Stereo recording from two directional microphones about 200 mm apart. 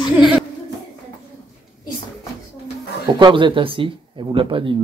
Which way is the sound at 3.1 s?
25° right (ahead or behind).